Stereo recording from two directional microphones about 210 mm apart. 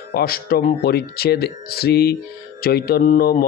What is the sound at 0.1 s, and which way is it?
Speech, 45° left (ahead or behind).